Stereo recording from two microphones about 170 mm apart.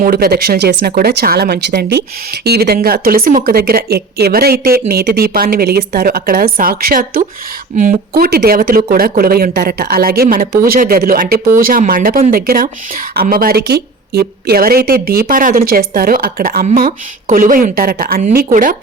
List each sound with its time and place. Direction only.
0.0 s speech: 65° right (ahead or behind)